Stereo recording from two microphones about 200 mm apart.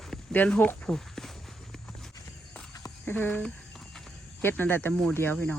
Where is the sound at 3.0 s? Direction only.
10° left (ahead or behind).